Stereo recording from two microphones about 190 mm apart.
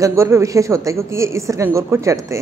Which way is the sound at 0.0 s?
15° right (ahead or behind).